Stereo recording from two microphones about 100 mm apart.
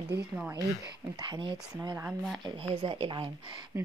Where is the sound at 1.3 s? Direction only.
55° right (ahead or behind).